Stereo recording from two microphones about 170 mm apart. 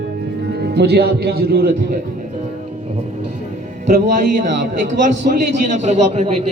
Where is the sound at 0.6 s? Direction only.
70° right (ahead or behind).